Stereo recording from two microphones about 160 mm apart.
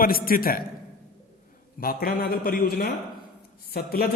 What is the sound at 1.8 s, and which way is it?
A man's voice, 65° left (ahead or behind).